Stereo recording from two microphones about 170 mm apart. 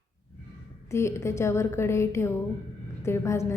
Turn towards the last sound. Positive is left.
turn(degrees=15)  # may be behind; listen again after turning